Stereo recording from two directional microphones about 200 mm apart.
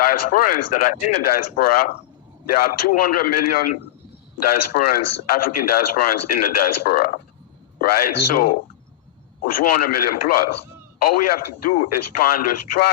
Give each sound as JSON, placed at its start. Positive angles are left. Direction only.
{"t": 0.0, "sound": "a man's voice", "side_deg": 45}